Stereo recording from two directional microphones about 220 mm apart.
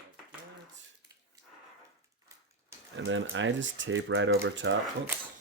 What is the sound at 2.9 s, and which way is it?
Speech, 60° right (ahead or behind).